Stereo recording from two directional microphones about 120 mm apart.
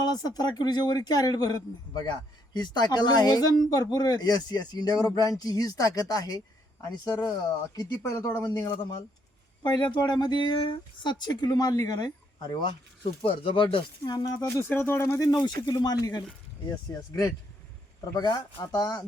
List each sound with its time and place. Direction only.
0.0 s speech: 35° left (ahead or behind)
9.6 s speech: 40° left (ahead or behind)
14.6 s speech: 20° left (ahead or behind)
15.3 s speech: 35° left (ahead or behind)